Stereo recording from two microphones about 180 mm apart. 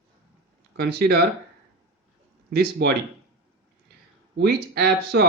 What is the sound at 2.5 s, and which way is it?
Speech, 65° right (ahead or behind).